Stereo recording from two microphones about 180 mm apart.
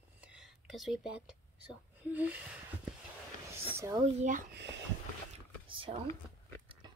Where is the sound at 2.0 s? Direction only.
10° right (ahead or behind).